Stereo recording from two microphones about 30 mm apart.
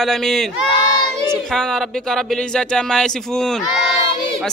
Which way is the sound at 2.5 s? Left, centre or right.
Left.